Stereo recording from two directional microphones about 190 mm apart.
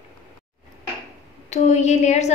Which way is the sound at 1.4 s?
35° left (ahead or behind).